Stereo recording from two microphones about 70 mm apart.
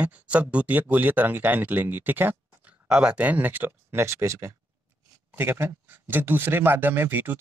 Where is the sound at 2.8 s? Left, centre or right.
Centre; by 7.4 s right.